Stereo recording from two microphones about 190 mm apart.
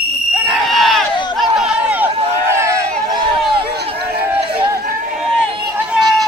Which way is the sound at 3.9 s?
55° right (ahead or behind).